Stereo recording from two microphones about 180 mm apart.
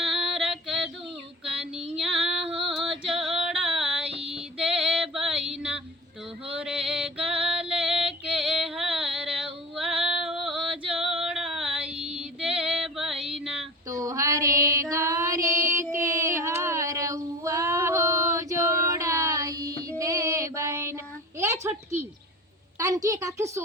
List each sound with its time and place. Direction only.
0.0 s female singing: centre (ahead or behind)
1.5 s child singing: 5° right (ahead or behind)
2.0 s female singing: 5° right (ahead or behind)
6.5 s music: 5° right (ahead or behind)
13.2 s a sound: 5° right (ahead or behind)
13.8 s female singing: 20° right (ahead or behind)
22.8 s a sound: 20° right (ahead or behind)